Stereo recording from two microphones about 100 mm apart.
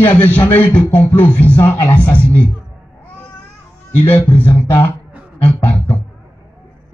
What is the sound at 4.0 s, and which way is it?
Speech, 20° left (ahead or behind).